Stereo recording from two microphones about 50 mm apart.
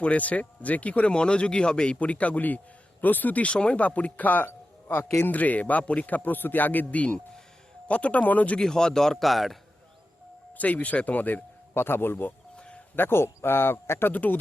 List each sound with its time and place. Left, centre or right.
0.0 s speech: left
2.0 s a man's voice: left
3.5 s speech: left
4.9 s speech: left
5.3 s a man's voice: left
8.5 s speech: centre
10.6 s a man's voice: left
11.7 s speech: left
12.5 s chicken: centre
13.0 s speech: left
14.1 s a man's voice: left